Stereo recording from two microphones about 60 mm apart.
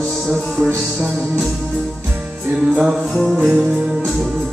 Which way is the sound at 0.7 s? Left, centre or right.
Right.